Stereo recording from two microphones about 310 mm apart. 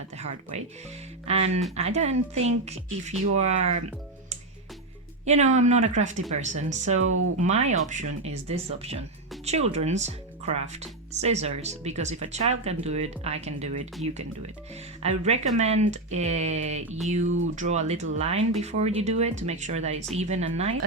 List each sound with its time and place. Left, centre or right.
0.5 s speech: right
5.2 s speech: right
8.0 s speech: right
8.4 s speech: centre